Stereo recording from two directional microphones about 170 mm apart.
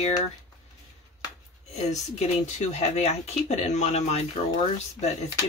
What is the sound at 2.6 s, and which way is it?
Speech, 40° left (ahead or behind).